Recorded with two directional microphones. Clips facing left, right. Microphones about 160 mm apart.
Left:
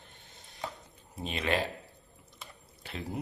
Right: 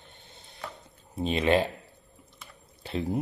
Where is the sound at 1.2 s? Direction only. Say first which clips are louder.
Right 8 dB; 30° right (ahead or behind).